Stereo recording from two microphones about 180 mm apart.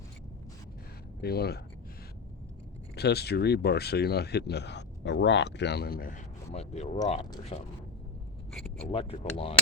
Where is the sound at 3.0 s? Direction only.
65° left (ahead or behind); by 7.7 s 35° left (ahead or behind).